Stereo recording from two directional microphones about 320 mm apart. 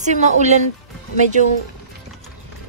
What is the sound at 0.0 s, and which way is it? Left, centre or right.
Speech, right.